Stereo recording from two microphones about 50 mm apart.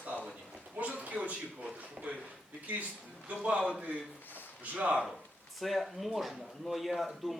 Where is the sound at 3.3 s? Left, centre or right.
Right.